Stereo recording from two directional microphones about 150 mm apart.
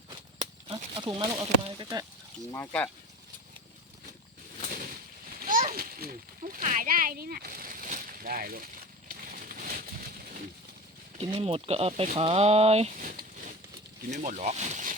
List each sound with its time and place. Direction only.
0.9 s speech: 30° right (ahead or behind)
2.5 s speech: 15° left (ahead or behind)
5.4 s a sound: 65° right (ahead or behind)
11.2 s speech: 40° right (ahead or behind)
13.0 s a sound: 70° right (ahead or behind)
14.1 s speech: 50° right (ahead or behind)